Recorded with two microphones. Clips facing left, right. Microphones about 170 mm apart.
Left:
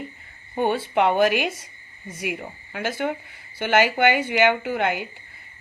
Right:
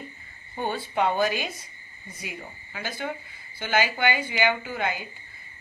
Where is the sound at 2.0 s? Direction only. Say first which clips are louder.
Left 9 dB; 80° left.